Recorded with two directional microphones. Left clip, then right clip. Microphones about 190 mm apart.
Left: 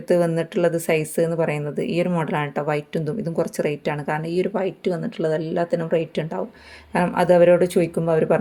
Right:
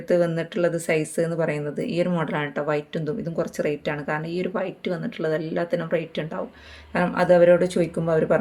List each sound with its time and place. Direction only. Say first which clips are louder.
0.1 s speech: left 2 dB; 35° left (ahead or behind)